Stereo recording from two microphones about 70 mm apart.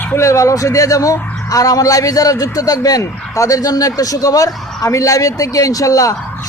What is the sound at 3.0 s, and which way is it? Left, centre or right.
Speech, left.